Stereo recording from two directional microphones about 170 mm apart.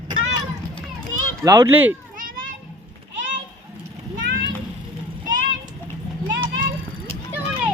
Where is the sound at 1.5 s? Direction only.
15° right (ahead or behind).